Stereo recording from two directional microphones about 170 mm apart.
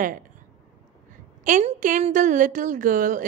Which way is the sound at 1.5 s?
45° right (ahead or behind).